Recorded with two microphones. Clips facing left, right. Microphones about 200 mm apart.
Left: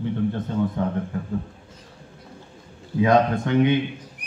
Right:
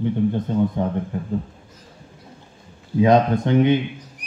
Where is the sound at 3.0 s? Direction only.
25° right (ahead or behind).